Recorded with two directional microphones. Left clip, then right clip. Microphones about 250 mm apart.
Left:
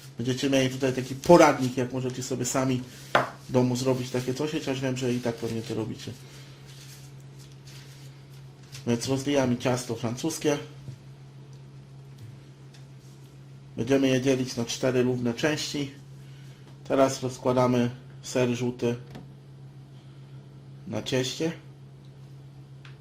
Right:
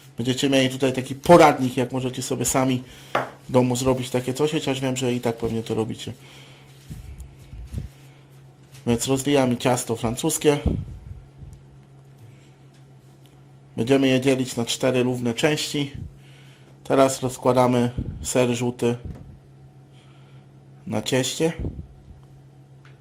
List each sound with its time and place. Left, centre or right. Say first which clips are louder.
0.2 s speech: right 5 dB; right
8.8 s speech: right 5 dB; right
13.7 s speech: right 4 dB; right
20.9 s speech: right 5 dB; right